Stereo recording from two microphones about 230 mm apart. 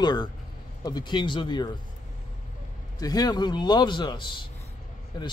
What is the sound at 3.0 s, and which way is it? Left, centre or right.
A man's voice, centre.